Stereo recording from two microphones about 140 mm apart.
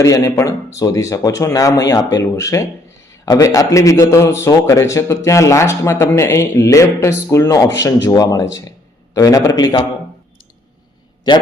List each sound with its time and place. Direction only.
0.0 s a man's voice: 25° left (ahead or behind)